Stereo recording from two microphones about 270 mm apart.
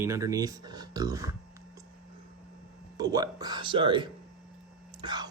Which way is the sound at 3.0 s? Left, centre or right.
Centre.